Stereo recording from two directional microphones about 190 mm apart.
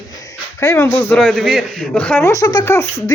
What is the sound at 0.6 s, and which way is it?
A man's voice, 15° left (ahead or behind).